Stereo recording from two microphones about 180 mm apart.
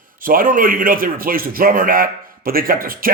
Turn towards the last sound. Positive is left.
turn(degrees=-55)  # may be behind; listen again after turning